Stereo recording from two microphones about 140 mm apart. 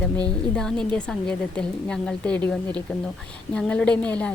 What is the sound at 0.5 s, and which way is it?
A woman's voice, 5° left (ahead or behind).